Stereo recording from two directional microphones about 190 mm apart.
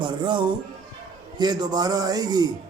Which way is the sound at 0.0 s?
25° right (ahead or behind).